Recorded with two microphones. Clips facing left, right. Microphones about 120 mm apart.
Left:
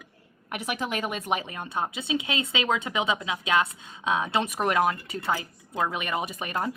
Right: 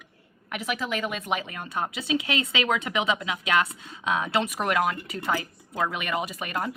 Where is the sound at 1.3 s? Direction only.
25° left (ahead or behind).